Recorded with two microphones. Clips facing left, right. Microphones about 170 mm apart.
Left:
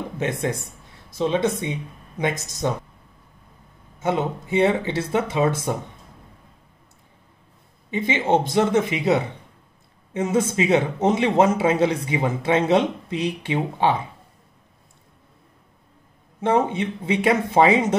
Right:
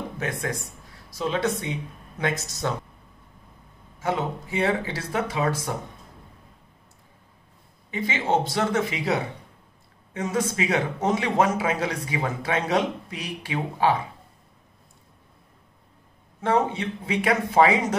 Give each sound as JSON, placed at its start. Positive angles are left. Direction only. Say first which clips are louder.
{"t": 0.2, "sound": "a man's voice", "louder": "left 6 dB", "side_deg": 25}
{"t": 4.0, "sound": "a man's voice", "louder": "left 3 dB", "side_deg": 20}
{"t": 7.9, "sound": "a man's voice", "louder": "left 4 dB", "side_deg": 20}
{"t": 16.3, "sound": "a man's voice", "louder": "left 3 dB", "side_deg": 20}